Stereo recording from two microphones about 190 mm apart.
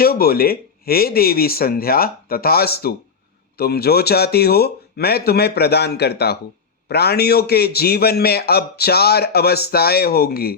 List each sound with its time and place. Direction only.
0.0 s a man's voice: 50° left (ahead or behind)